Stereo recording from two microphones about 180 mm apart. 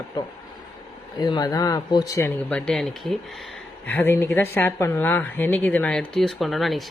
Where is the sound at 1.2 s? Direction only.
25° left (ahead or behind).